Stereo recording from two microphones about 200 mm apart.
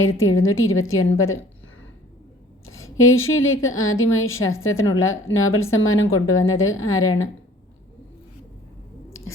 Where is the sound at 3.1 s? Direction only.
90° left.